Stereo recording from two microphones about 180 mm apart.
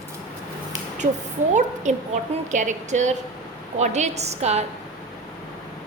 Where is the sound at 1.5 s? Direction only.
40° right (ahead or behind).